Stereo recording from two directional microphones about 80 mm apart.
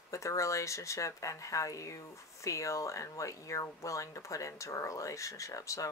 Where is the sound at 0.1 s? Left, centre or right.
Left.